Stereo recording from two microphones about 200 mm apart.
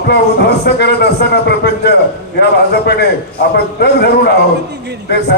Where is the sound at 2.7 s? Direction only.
55° left (ahead or behind).